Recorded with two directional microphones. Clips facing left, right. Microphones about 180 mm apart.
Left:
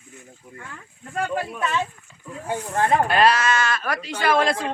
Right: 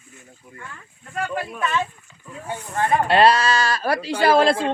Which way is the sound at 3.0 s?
30° right (ahead or behind).